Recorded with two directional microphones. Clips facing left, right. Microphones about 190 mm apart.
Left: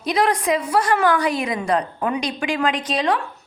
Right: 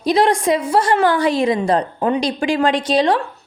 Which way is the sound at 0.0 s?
30° right (ahead or behind).